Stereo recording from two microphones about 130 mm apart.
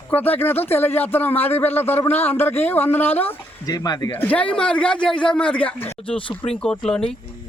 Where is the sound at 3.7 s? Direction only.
30° left (ahead or behind).